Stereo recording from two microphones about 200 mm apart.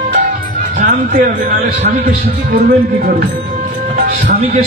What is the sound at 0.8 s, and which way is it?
Music, 45° right (ahead or behind).